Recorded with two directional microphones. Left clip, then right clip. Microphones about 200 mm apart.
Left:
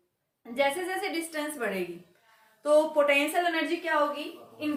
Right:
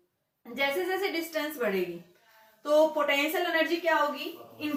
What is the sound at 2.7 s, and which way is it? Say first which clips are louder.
Speech: left 1 dB; 55° left (ahead or behind).